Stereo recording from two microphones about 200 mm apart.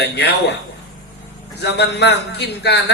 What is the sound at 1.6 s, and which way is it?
A man's voice, 55° left (ahead or behind).